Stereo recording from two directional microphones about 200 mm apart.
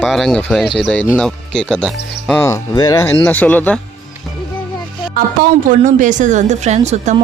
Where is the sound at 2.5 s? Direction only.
20° left (ahead or behind).